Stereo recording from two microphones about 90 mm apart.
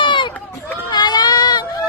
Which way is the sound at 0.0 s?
60° left (ahead or behind).